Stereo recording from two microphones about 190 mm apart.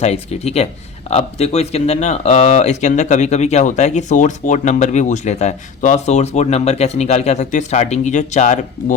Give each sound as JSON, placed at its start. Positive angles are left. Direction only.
{"t": 0.0, "sound": "speech", "side_deg": 35}